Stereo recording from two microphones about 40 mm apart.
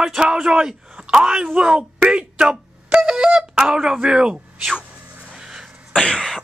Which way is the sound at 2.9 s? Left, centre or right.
Centre.